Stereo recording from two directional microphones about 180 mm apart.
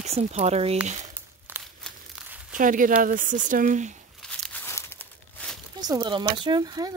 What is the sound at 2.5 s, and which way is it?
Speech, 50° right (ahead or behind).